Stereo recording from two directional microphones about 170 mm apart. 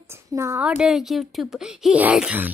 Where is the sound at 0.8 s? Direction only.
5° right (ahead or behind).